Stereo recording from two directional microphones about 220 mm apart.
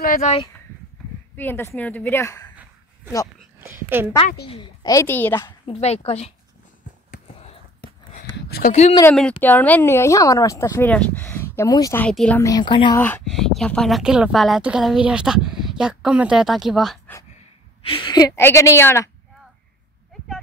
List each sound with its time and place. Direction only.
0.0 s speech: 40° left (ahead or behind)
1.3 s speech: 10° left (ahead or behind)
3.7 s a woman's voice: 10° right (ahead or behind)
4.5 s speech: 20° left (ahead or behind)
5.7 s speech: 30° left (ahead or behind)
7.1 s a sound: 35° left (ahead or behind)
9.4 s speech: 5° left (ahead or behind)
13.0 s a woman's voice: 5° left (ahead or behind)
17.8 s speech: 20° left (ahead or behind)